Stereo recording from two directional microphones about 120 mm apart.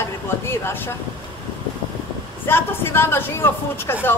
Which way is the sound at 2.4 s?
20° left (ahead or behind).